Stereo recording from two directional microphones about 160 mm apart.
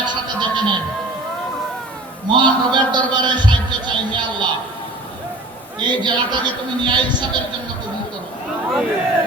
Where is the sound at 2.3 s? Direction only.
30° right (ahead or behind).